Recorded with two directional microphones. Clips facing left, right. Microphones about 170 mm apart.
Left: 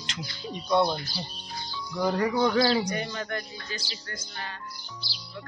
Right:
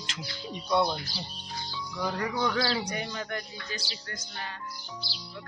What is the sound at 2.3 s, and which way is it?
Speech, 25° left (ahead or behind).